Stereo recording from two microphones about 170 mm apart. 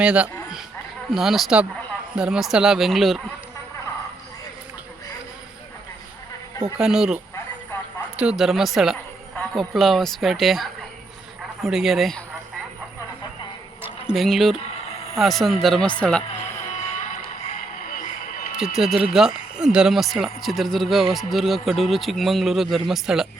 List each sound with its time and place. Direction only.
0.0 s speech: 5° right (ahead or behind)
6.7 s speech: 5° right (ahead or behind)
7.3 s telephone: 15° left (ahead or behind)
8.1 s speech: 5° right (ahead or behind)
13.8 s speech: centre (ahead or behind)
17.8 s a sound: 55° left (ahead or behind)
18.6 s speech: centre (ahead or behind)